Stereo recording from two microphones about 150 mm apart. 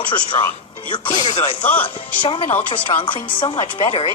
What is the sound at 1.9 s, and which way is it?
Speech, 35° left (ahead or behind).